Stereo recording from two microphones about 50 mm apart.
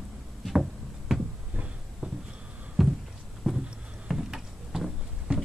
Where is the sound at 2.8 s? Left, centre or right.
Centre.